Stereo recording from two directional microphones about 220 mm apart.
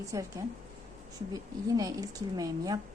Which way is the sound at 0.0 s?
15° right (ahead or behind).